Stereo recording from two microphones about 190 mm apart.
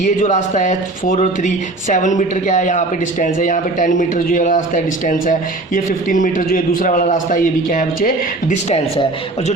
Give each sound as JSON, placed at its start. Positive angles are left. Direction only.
{"t": 0.0, "sound": "speech", "side_deg": 40}